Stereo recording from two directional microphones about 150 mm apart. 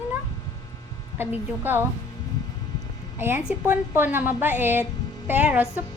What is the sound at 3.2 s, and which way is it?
A woman's voice, 15° right (ahead or behind).